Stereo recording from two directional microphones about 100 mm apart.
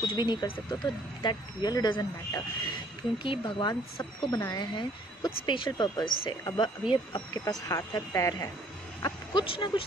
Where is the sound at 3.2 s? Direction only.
55° left (ahead or behind).